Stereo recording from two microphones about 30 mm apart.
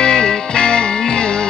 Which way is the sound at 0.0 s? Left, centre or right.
Left.